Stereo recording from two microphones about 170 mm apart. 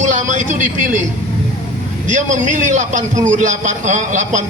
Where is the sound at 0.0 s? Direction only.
45° right (ahead or behind).